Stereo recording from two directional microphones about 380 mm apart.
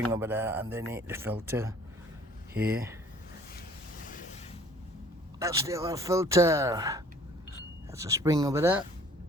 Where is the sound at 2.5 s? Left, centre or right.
Right.